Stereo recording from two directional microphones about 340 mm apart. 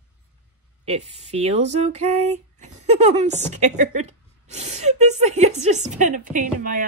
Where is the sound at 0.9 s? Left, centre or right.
Centre.